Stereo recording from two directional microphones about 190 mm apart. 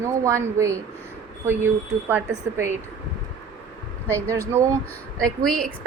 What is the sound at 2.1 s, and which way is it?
Speech, 10° right (ahead or behind).